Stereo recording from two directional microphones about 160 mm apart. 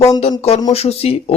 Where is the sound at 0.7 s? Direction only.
40° left (ahead or behind).